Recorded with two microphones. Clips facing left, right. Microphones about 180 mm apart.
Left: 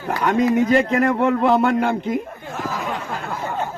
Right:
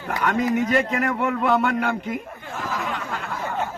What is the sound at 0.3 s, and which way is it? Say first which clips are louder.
A man's voice: left 5 dB; 30° left (ahead or behind).